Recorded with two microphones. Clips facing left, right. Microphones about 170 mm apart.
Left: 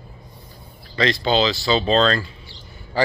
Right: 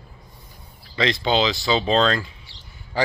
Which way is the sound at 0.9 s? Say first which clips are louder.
Left 2 dB; 15° right (ahead or behind).